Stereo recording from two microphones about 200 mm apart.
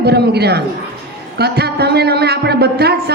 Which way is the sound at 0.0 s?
55° right (ahead or behind).